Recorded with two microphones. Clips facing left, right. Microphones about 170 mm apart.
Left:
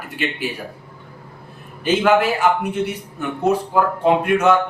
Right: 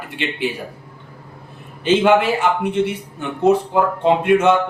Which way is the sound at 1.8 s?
25° right (ahead or behind).